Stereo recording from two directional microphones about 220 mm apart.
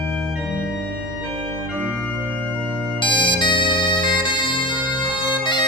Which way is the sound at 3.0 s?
20° left (ahead or behind).